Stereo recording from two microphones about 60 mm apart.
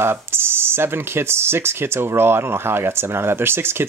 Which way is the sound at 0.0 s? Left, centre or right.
Right.